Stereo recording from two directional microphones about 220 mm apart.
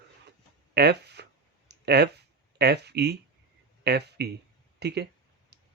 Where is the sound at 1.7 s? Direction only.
50° right (ahead or behind).